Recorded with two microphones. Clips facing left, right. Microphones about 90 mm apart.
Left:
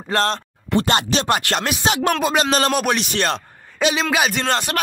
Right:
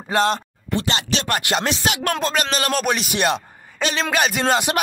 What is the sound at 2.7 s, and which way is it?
Speech, centre (ahead or behind).